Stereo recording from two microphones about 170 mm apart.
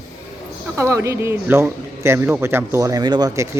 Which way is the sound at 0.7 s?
15° right (ahead or behind).